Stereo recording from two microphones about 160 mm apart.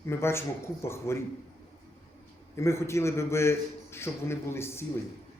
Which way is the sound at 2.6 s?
15° left (ahead or behind).